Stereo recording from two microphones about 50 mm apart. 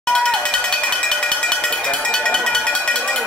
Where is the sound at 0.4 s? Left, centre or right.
Centre.